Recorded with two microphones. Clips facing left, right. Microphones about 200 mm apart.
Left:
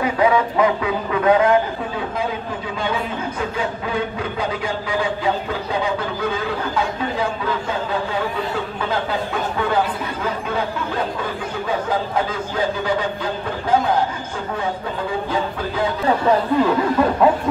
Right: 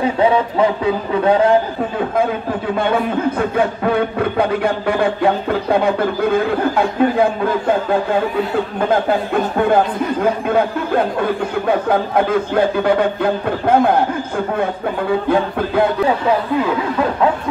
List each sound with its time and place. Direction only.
0.0 s a sound: 30° right (ahead or behind)
1.2 s a man's voice: 30° right (ahead or behind)
2.7 s speech: 60° right (ahead or behind)
15.2 s speech: 60° right (ahead or behind)